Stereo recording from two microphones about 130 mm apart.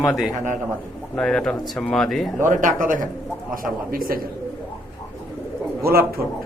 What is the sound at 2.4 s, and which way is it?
A man's voice, 80° right.